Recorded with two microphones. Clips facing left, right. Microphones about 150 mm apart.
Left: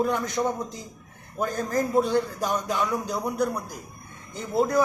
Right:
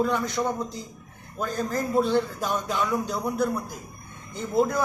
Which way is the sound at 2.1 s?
40° left (ahead or behind).